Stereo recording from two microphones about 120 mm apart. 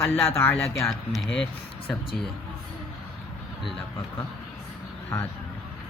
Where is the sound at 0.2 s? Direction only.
20° left (ahead or behind).